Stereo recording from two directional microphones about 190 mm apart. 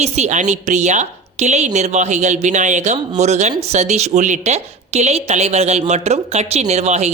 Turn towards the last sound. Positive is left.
turn(degrees=-35)  # may be behind; listen again after turning